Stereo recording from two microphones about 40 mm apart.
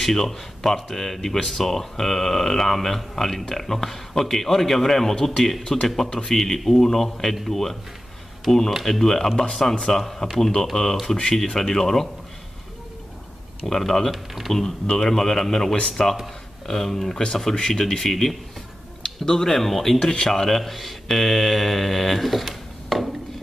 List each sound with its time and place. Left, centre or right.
0.0 s speech: centre
13.7 s speech: centre
14.1 s speech: centre
14.5 s speech: centre